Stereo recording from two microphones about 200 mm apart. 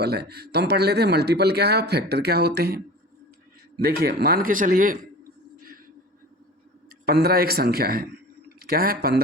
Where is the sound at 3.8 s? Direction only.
50° right (ahead or behind).